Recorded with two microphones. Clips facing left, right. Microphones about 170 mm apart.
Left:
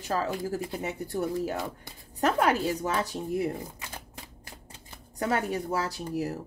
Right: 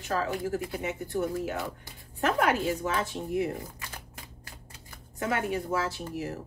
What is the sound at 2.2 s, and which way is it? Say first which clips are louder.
A woman's voice: left 1 dB; 40° left (ahead or behind).